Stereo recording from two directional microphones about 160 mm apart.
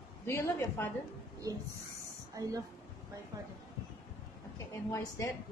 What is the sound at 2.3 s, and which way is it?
Speech, 20° right (ahead or behind).